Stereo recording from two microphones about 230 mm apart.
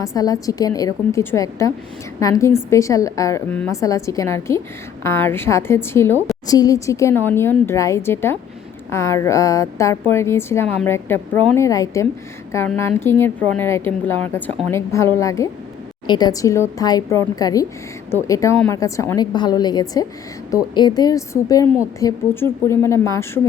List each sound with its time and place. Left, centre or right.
0.0 s a woman's voice: centre